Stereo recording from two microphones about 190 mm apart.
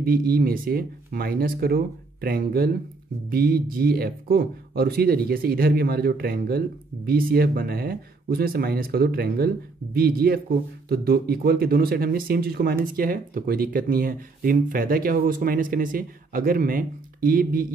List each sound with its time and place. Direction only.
0.0 s speech: 50° right (ahead or behind)